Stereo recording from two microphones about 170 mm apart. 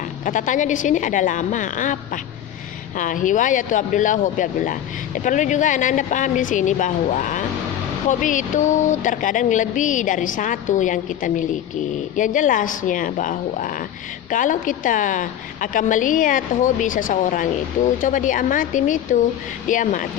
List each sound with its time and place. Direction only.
0.3 s speech: 50° left (ahead or behind)
3.0 s speech: 50° left (ahead or behind)